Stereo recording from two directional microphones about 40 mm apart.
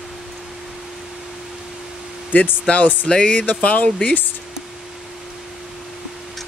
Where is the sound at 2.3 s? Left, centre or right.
Left.